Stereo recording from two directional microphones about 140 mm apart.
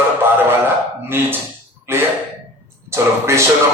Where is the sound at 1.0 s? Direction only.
15° right (ahead or behind).